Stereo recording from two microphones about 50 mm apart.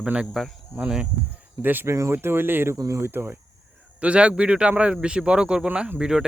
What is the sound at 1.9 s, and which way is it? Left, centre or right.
Speech, right.